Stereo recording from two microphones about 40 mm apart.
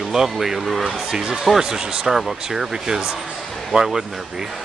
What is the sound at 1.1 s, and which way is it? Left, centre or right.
Speech, centre.